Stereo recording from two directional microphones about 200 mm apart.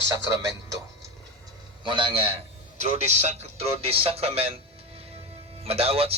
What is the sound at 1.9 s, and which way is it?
A man's voice, 25° right (ahead or behind).